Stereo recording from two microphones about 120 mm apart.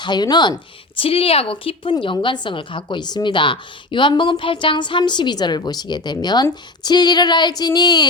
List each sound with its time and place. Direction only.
0.0 s a woman's voice: 35° left (ahead or behind)
1.0 s a woman's voice: 50° left (ahead or behind); by 8.0 s 35° left (ahead or behind)